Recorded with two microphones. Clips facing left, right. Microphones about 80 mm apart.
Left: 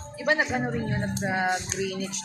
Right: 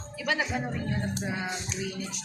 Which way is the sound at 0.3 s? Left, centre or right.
Left.